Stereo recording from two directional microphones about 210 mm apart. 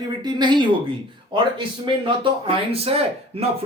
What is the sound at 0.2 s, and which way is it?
Speech, 20° right (ahead or behind).